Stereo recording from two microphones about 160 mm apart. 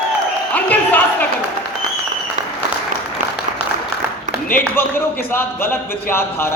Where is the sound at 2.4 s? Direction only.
50° right (ahead or behind).